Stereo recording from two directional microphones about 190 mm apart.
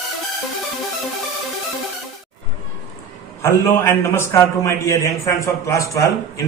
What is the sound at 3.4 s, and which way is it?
A man's voice, 15° left (ahead or behind).